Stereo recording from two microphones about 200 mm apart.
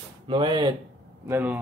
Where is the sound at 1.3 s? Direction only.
10° right (ahead or behind).